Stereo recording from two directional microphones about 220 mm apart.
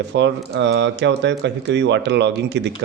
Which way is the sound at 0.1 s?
50° right (ahead or behind).